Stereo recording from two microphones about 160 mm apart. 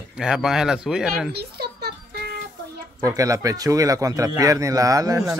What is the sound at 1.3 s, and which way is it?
Speech, 85° right.